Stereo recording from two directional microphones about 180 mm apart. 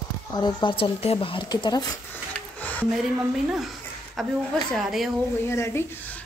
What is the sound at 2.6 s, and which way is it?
Music, 10° left (ahead or behind).